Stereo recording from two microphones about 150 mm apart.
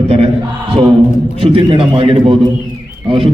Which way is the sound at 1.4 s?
35° right (ahead or behind).